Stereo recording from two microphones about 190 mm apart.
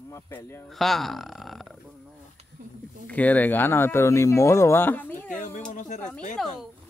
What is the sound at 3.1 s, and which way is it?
Speech, 10° left (ahead or behind).